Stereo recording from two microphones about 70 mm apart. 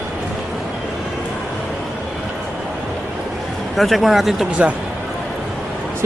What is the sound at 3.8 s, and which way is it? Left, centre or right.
Speech, centre.